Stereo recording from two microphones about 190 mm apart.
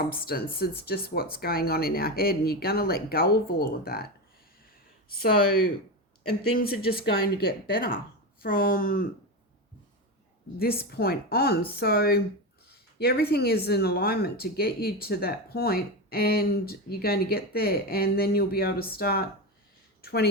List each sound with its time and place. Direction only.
0.1 s speech: 50° left (ahead or behind)
6.4 s speech: 55° left (ahead or behind)
10.6 s a woman's voice: 55° left (ahead or behind)